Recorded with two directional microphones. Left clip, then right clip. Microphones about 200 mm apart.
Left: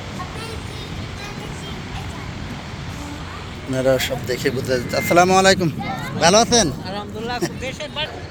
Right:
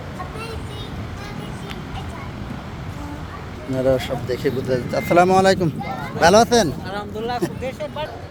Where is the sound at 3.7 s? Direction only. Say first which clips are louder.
Left 1 dB; 10° right (ahead or behind); by 6.7 s 25° right (ahead or behind).